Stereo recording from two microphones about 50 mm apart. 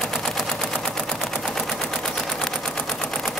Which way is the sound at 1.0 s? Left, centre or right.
Centre.